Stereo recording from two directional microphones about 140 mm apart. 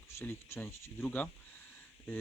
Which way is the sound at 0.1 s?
20° left (ahead or behind).